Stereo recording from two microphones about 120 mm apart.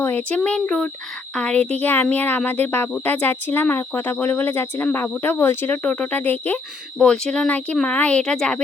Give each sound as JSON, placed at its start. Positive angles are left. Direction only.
{"t": 0.0, "sound": "speech", "side_deg": 15}